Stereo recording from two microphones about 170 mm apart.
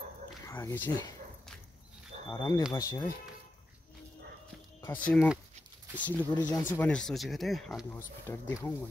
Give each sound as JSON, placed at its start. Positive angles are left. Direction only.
{"t": 0.5, "sound": "speech", "side_deg": 15}
{"t": 2.2, "sound": "speech", "side_deg": 20}
{"t": 4.8, "sound": "speech", "side_deg": 10}
{"t": 8.3, "sound": "speech", "side_deg": 15}